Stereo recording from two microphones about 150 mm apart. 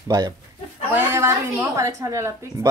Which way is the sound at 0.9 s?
15° right (ahead or behind).